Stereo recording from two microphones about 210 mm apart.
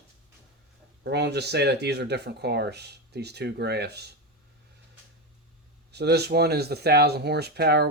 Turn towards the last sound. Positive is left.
turn(degrees=-50)  # may be behind; listen again after turning